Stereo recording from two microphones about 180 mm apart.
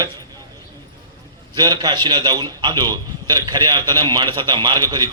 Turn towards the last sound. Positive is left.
turn(degrees=-25)  # may be behind; listen again after turning